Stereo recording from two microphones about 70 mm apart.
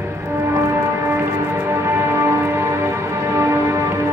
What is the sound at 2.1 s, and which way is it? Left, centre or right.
Music, right.